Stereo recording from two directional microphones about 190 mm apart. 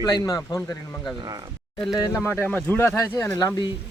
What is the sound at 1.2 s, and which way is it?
Speech, 20° right (ahead or behind).